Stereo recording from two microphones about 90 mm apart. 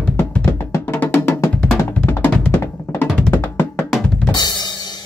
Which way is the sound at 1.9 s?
20° left (ahead or behind).